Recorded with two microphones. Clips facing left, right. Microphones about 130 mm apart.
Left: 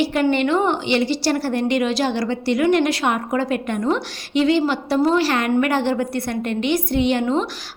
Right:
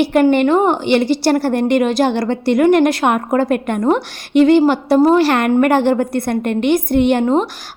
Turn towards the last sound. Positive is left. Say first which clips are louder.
# right 5 dB
turn(degrees=-50)  # may be behind; listen again after turning